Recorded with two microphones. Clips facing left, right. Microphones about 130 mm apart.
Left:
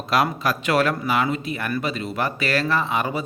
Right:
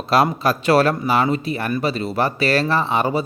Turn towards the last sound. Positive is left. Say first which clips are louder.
# right 4 dB
turn(degrees=-30)  # may be behind; listen again after turning